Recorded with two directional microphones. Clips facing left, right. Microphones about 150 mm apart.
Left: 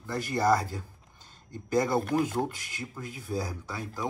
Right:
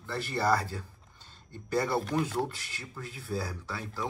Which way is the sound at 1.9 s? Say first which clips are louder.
Left 3 dB; 50° left (ahead or behind).